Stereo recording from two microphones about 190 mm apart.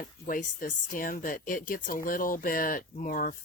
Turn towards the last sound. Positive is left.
turn(degrees=45)  # may be behind; listen again after turning